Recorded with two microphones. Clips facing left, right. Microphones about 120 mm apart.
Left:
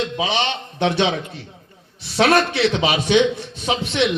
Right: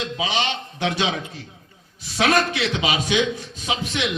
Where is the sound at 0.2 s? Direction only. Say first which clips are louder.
Left 3 dB; 25° left (ahead or behind).